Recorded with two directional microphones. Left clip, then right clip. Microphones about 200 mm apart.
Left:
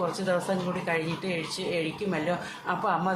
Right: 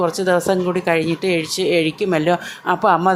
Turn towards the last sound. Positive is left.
turn(degrees=-45)  # may be behind; listen again after turning